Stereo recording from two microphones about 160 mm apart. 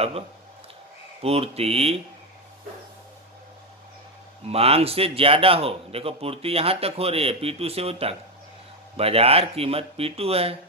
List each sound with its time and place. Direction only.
1.2 s a man's voice: 40° right (ahead or behind)
4.5 s a man's voice: 40° right (ahead or behind)